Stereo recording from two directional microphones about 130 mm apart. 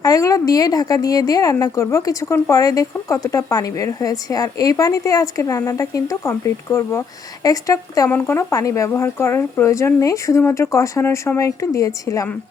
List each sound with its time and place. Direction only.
0.0 s a woman's voice: 25° left (ahead or behind)